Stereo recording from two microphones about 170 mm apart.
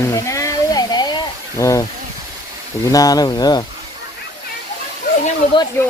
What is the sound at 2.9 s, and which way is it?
Speech, 20° left (ahead or behind).